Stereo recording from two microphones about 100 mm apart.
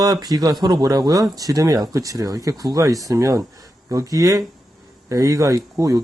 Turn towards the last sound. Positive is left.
turn(degrees=-30)  # may be behind; listen again after turning